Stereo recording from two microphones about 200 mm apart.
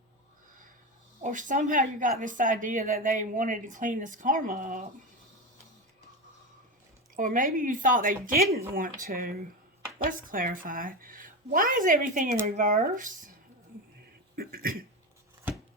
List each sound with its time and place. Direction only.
1.2 s a woman's voice: 40° right (ahead or behind)
7.2 s a woman's voice: 45° right (ahead or behind)
14.3 s a woman's voice: 45° right (ahead or behind)